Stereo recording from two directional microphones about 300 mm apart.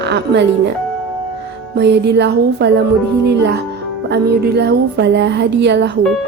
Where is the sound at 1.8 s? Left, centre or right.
Right.